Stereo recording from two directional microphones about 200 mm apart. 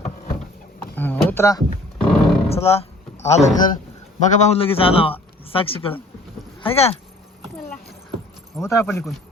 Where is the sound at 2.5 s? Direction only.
30° left (ahead or behind).